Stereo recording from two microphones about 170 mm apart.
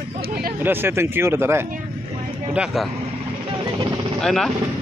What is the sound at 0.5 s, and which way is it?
Speech, 10° right (ahead or behind).